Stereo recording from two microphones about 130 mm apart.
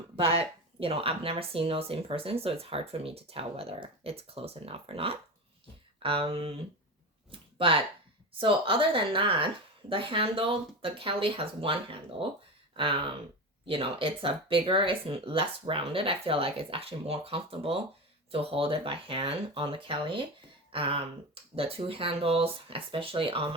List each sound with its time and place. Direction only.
0.2 s speech: 45° right (ahead or behind)
7.3 s a sound: 45° right (ahead or behind)
8.4 s speech: 40° right (ahead or behind)